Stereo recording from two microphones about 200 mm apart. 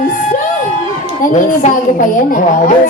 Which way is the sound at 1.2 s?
40° left (ahead or behind).